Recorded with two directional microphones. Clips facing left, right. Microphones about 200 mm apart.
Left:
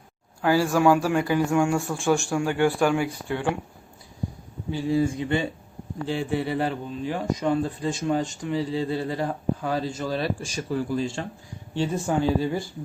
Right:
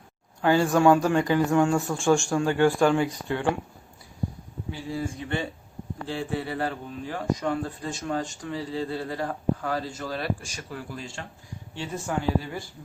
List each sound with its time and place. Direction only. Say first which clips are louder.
0.4 s speech: even; 5° left (ahead or behind)
4.7 s speech: left 9 dB; 20° left (ahead or behind)